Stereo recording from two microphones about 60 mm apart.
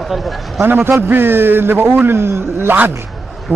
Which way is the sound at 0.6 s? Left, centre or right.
Right.